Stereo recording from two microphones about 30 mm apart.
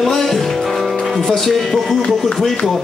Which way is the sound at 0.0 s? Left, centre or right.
Centre.